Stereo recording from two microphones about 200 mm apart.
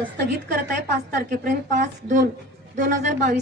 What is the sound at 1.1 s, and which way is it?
A woman's voice, 50° right (ahead or behind).